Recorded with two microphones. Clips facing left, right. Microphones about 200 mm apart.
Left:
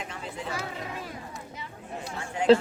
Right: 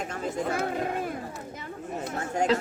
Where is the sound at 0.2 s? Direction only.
45° right (ahead or behind).